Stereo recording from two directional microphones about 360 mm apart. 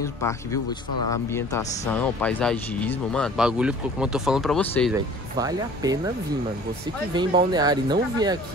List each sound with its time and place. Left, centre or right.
0.2 s speech: centre
5.4 s speech: centre
7.2 s speech: centre